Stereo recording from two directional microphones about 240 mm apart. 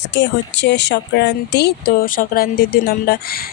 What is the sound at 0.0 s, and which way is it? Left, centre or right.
Speech, left.